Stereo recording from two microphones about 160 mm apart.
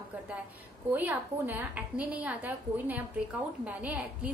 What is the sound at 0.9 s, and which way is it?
A woman's voice, 10° right (ahead or behind).